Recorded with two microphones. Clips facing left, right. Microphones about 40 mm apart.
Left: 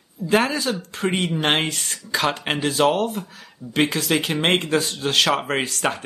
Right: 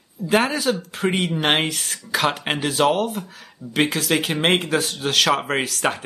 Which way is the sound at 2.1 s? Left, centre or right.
Right.